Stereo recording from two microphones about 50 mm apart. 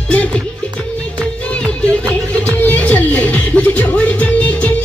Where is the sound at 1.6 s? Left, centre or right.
Left.